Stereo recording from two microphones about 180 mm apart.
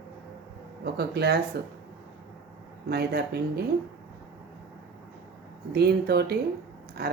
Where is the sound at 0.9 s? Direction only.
65° right (ahead or behind).